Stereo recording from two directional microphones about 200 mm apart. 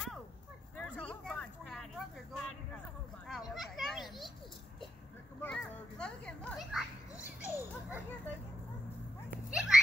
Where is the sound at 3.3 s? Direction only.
Centre (ahead or behind).